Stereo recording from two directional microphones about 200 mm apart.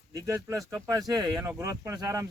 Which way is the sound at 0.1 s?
15° right (ahead or behind).